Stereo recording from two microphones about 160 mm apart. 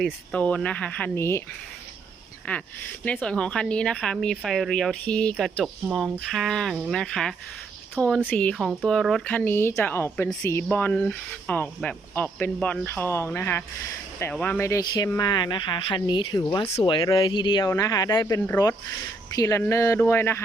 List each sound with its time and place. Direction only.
0.0 s speech: 5° left (ahead or behind)
2.5 s speech: 10° left (ahead or behind)
8.5 s speech: centre (ahead or behind); by 18.3 s 25° left (ahead or behind)
18.3 s speech: 15° left (ahead or behind)